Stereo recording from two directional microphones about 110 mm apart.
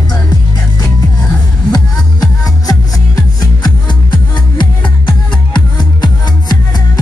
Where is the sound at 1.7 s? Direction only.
35° left (ahead or behind).